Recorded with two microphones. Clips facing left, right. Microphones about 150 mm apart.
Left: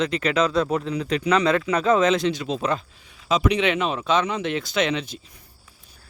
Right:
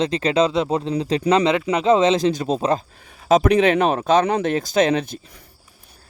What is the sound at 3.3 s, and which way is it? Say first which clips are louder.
Speech: right 6 dB; 45° right (ahead or behind).